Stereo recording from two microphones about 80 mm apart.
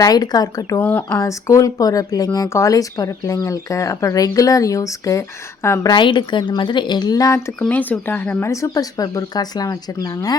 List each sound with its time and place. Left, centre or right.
0.0 s speech: left
0.8 s speech: left
1.2 s speech: left
5.8 s a woman's voice: left
7.7 s speech: left
8.4 s speech: left